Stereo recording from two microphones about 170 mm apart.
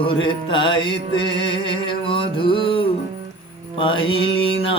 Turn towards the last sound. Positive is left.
turn(degrees=30)  # may be behind; listen again after turning